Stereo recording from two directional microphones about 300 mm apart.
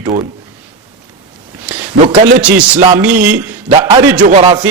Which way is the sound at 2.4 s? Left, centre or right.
Centre.